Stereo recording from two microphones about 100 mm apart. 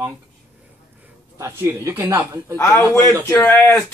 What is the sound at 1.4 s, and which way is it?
A man's voice, 30° right (ahead or behind).